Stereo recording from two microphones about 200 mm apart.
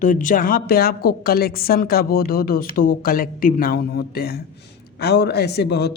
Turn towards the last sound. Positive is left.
turn(degrees=55)  # may be behind; listen again after turning